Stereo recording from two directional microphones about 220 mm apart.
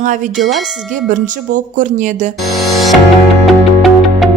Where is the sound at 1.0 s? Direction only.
35° right (ahead or behind).